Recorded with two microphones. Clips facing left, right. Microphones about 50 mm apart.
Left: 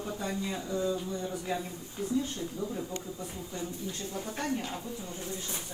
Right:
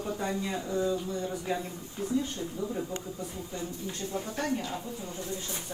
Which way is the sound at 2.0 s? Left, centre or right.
Right.